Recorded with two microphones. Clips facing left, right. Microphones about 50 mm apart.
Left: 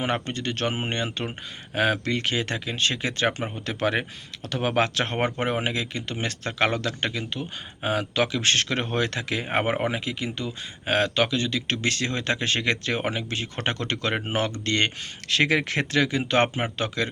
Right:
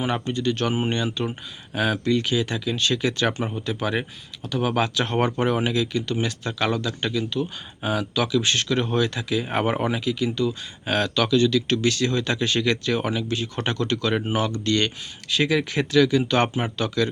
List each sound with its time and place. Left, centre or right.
0.0 s speech: left
3.7 s speech: left
5.1 s speech: left
6.2 s speech: left
9.0 s speech: left
9.5 s speech: left
15.3 s speech: left
16.0 s speech: left